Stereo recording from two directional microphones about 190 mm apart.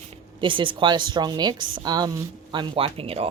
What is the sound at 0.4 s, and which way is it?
A woman's voice, 25° right (ahead or behind).